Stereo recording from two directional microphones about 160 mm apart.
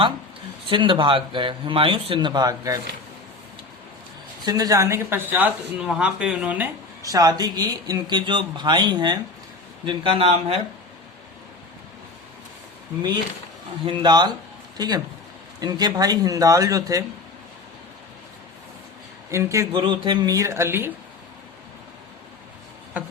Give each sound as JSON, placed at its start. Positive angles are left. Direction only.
{"t": 0.7, "sound": "speech", "side_deg": -30}
{"t": 4.4, "sound": "speech", "side_deg": -25}
{"t": 7.0, "sound": "speech", "side_deg": -20}
{"t": 13.8, "sound": "speech", "side_deg": -30}
{"t": 19.3, "sound": "speech", "side_deg": -20}
{"t": 19.7, "sound": "speech", "side_deg": -30}